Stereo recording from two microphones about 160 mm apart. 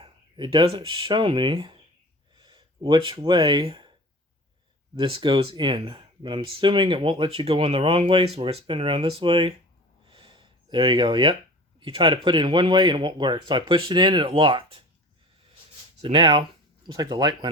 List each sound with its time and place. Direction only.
0.0 s speech: 30° right (ahead or behind)
4.9 s speech: 30° right (ahead or behind)
10.1 s a sound: 30° right (ahead or behind)
11.8 s speech: 30° right (ahead or behind)
16.0 s speech: 35° right (ahead or behind)